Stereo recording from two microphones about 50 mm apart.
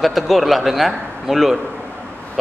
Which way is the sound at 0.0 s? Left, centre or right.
Centre.